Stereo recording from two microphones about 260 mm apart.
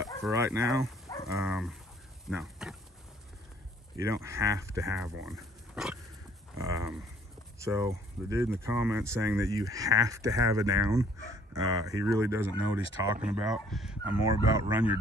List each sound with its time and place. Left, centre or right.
0.3 s speech: centre
1.1 s dog: centre
1.4 s speech: centre
2.2 s a sound: centre
3.9 s speech: centre
5.2 s dog: centre
6.6 s livestock: centre
7.6 s speech: centre
14.2 s speech: centre